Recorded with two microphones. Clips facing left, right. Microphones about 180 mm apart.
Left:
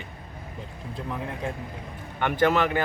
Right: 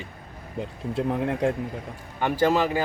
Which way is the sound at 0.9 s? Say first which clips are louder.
Right 8 dB; 70° right (ahead or behind).